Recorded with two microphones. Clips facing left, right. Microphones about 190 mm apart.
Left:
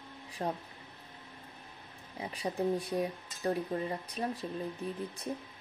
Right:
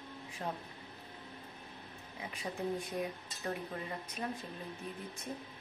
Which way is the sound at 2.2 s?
35° left (ahead or behind).